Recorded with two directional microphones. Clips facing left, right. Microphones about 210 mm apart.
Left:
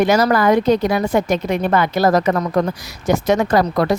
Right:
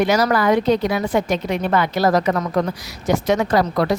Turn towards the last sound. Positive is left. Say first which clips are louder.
# left 2 dB
turn(degrees=45)  # may be behind; listen again after turning